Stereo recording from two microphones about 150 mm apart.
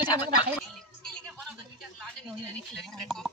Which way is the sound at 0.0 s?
30° left (ahead or behind).